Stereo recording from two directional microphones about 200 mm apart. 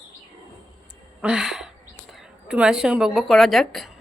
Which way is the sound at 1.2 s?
5° right (ahead or behind).